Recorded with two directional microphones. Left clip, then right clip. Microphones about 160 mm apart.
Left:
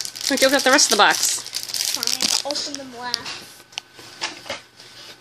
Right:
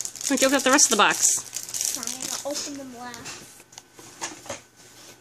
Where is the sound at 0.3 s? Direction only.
40° right (ahead or behind).